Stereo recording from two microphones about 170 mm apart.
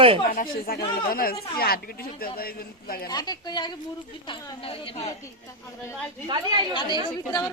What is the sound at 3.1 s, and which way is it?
Speech, 25° left (ahead or behind).